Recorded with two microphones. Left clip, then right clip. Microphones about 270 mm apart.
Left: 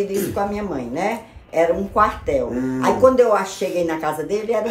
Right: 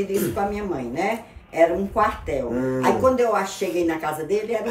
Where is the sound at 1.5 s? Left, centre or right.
Centre.